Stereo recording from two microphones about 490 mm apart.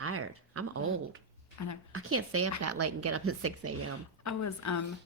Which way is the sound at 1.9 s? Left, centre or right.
Right.